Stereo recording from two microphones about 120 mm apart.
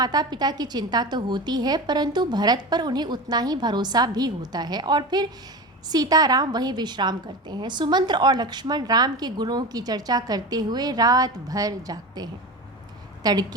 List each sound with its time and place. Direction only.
0.0 s a woman's voice: 35° right (ahead or behind)